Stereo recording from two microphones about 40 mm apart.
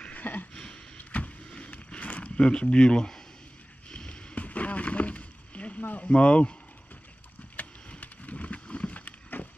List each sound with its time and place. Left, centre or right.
0.1 s a sound: left
0.9 s vehicle: left
2.3 s speech: left
3.9 s rowboat: left
5.8 s a sound: left
6.0 s speech: left
7.9 s vehicle: left